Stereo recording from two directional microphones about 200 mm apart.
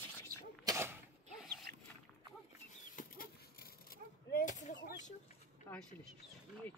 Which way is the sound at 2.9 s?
45° left (ahead or behind).